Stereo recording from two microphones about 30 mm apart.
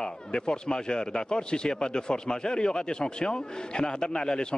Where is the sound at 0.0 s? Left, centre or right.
Left.